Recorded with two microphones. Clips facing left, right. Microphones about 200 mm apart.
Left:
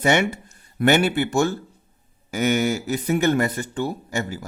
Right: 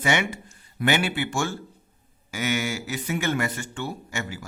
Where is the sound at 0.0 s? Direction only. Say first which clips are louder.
Left 5 dB; 45° left (ahead or behind).